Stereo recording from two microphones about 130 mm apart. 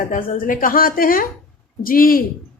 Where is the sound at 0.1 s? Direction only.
90° left.